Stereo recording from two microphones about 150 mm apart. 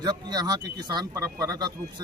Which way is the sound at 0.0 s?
25° right (ahead or behind).